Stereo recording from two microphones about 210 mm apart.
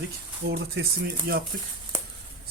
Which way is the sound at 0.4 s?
50° right (ahead or behind).